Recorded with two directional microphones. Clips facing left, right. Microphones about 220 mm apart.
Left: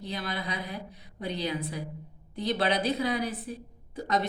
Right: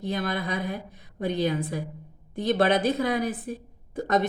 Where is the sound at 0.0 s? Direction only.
50° right (ahead or behind).